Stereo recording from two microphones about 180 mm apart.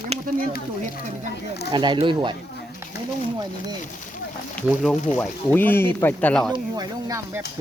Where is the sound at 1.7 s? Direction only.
25° right (ahead or behind).